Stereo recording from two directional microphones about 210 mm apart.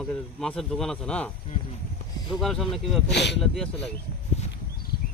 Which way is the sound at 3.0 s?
55° left (ahead or behind).